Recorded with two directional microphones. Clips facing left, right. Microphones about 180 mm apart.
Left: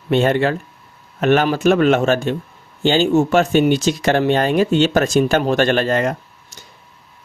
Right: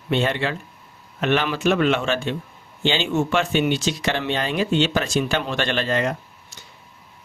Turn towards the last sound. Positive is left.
turn(degrees=45)  # may be behind; listen again after turning